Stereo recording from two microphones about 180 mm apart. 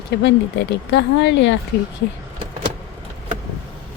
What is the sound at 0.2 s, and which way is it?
Speech, 70° left (ahead or behind).